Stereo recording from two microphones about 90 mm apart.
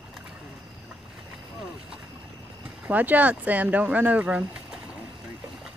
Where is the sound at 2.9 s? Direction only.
20° right (ahead or behind).